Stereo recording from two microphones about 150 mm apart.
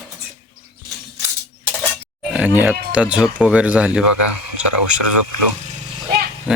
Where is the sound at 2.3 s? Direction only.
10° right (ahead or behind).